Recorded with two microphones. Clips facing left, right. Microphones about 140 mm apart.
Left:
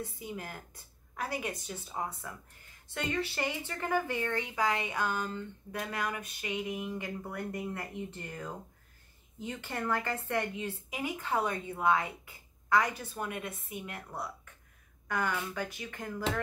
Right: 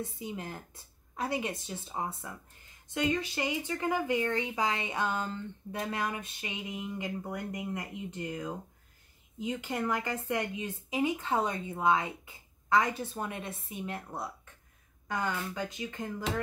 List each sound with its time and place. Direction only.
0.0 s a woman's voice: 25° right (ahead or behind)